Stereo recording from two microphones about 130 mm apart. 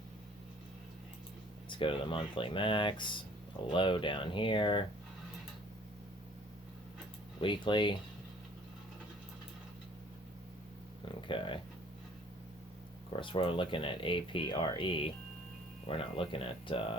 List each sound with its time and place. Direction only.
1.7 s speech: 40° left (ahead or behind)
7.3 s speech: 40° left (ahead or behind)
11.3 s speech: 40° left (ahead or behind)
13.1 s speech: 40° left (ahead or behind)